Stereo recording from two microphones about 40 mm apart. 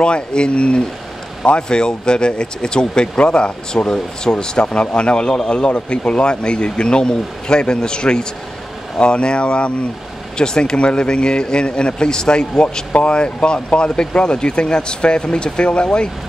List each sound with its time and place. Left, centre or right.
0.0 s speech: left